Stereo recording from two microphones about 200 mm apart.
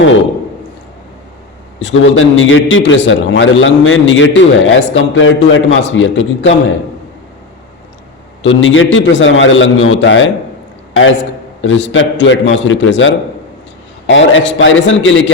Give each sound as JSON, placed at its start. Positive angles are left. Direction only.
{"t": 1.8, "sound": "a man's voice", "side_deg": 70}
{"t": 8.4, "sound": "a man's voice", "side_deg": 75}
{"t": 11.6, "sound": "a man's voice", "side_deg": 70}